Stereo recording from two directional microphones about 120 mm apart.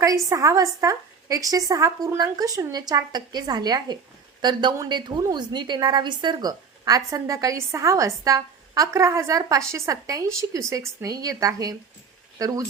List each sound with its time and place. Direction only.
0.0 s a woman's voice: 30° right (ahead or behind)